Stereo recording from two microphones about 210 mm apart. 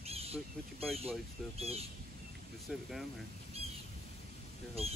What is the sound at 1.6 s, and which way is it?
Speech, 30° right (ahead or behind).